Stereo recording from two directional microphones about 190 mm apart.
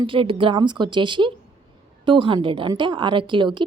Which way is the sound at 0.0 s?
25° right (ahead or behind).